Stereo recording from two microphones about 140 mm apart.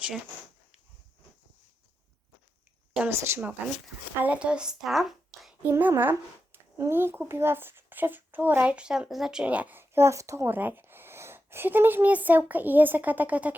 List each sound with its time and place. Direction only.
2.9 s a sound: 10° right (ahead or behind)
3.2 s speech: 20° right (ahead or behind)
4.2 s speech: 10° right (ahead or behind)
5.6 s speech: 20° right (ahead or behind)